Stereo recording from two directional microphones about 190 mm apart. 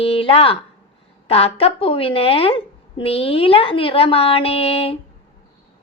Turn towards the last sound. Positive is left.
turn(degrees=30)  # may be behind; listen again after turning